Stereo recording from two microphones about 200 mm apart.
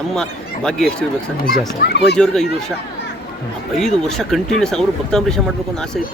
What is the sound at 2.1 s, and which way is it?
Speech, 5° left (ahead or behind).